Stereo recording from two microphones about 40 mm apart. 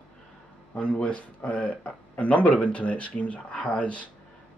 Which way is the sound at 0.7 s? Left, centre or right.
Left.